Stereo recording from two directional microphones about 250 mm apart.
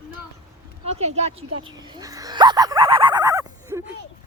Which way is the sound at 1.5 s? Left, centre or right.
Right.